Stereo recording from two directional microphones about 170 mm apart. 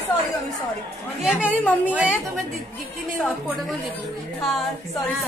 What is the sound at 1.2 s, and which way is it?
Speech, 5° right (ahead or behind).